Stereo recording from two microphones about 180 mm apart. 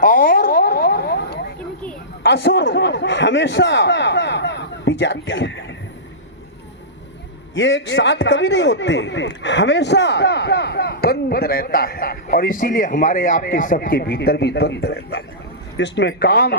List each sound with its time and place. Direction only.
0.0 s a sound: 50° left (ahead or behind)
2.2 s a man's voice: 65° left (ahead or behind); by 5.6 s 90° left
7.5 s a man's voice: 80° left; by 16.6 s 65° left (ahead or behind)